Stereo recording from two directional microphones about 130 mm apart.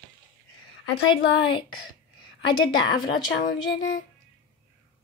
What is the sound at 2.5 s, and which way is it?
Speech, 35° left (ahead or behind).